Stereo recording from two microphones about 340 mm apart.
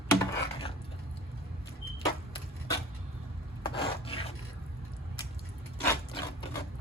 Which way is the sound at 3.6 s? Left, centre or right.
Centre.